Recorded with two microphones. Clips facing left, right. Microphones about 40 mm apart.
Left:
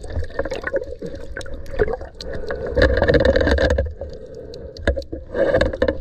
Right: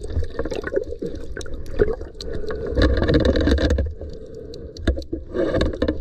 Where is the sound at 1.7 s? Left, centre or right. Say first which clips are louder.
Even; left.